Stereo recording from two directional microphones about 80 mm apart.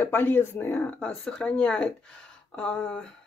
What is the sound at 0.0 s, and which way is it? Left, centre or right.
Speech, left.